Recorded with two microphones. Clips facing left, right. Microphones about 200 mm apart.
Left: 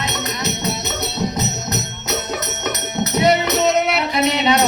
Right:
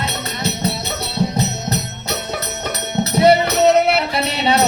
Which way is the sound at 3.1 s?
30° right (ahead or behind).